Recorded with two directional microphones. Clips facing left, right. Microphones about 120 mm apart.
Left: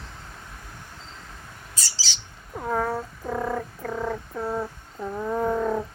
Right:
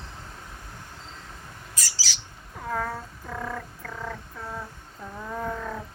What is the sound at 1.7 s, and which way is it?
Bird, 30° left (ahead or behind).